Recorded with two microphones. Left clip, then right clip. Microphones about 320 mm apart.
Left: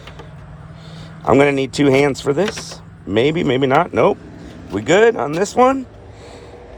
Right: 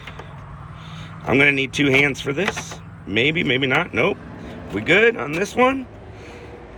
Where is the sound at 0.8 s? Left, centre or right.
Left.